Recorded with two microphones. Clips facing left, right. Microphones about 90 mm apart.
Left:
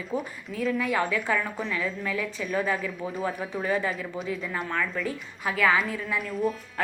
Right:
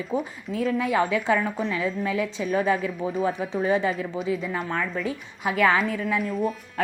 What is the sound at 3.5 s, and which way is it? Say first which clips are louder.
Speech: right 4 dB; 25° right (ahead or behind).